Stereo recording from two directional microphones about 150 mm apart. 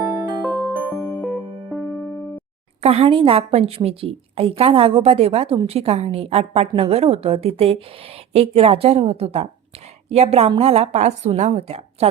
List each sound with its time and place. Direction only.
0.0 s music: 10° right (ahead or behind)
0.4 s music: centre (ahead or behind)
0.7 s music: 15° right (ahead or behind)
2.8 s a woman's voice: 40° right (ahead or behind)